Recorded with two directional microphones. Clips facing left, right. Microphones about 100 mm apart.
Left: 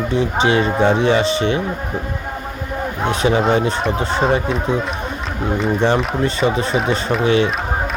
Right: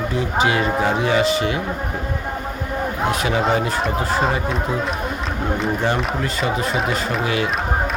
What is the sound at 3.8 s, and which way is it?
Speech, centre (ahead or behind).